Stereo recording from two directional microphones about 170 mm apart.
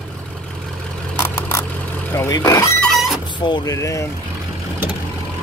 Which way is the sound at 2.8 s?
Centre (ahead or behind).